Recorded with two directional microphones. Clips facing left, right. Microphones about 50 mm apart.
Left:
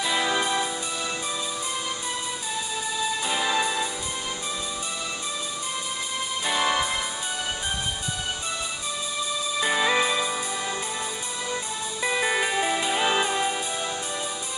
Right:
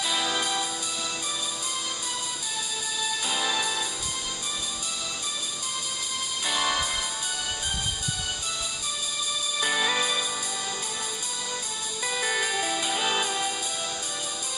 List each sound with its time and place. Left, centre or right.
0.0 s music: left
3.0 s music: left
6.4 s music: left
9.6 s music: left
12.0 s music: left